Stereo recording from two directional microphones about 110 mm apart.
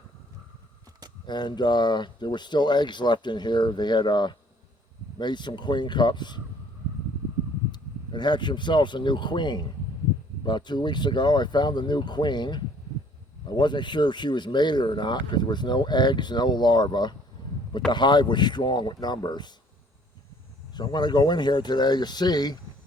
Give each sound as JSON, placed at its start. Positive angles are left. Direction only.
{"t": 1.3, "sound": "speech", "side_deg": 40}
{"t": 7.7, "sound": "speech", "side_deg": 45}
{"t": 20.7, "sound": "speech", "side_deg": 40}